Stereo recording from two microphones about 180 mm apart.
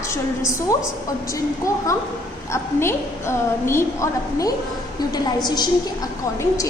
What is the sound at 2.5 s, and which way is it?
A woman's voice, 15° left (ahead or behind).